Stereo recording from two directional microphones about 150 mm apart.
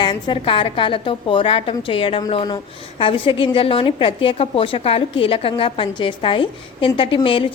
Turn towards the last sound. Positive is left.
turn(degrees=35)  # may be behind; listen again after turning